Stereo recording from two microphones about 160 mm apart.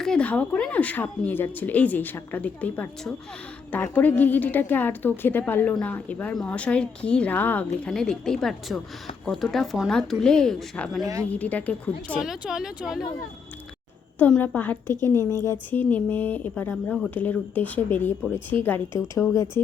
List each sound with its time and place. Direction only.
0.0 s speech: 5° left (ahead or behind)
12.2 s speech: 5° right (ahead or behind)
14.2 s speech: 10° left (ahead or behind)